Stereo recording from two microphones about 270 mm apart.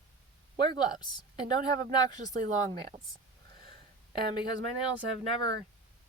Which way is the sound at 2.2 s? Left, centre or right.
Right.